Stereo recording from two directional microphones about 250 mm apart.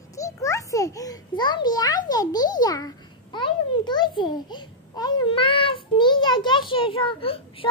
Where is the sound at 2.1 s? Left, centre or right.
Centre.